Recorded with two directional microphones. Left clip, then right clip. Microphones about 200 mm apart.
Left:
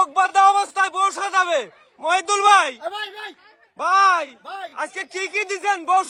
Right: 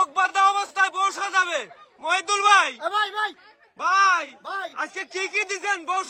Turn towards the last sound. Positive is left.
turn(degrees=-10)  # may be behind; listen again after turning